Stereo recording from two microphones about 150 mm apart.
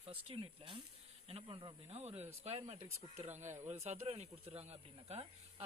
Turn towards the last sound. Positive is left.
turn(degrees=-45)  # may be behind; listen again after turning